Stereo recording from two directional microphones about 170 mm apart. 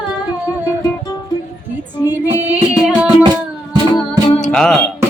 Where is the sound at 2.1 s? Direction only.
10° right (ahead or behind).